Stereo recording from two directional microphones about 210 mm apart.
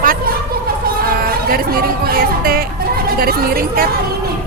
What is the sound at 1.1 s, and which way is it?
A woman's voice, 45° right (ahead or behind).